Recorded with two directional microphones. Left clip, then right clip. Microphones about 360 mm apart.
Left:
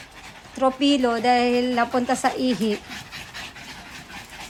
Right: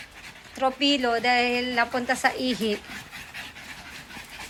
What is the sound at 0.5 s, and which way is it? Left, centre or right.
Speech, centre.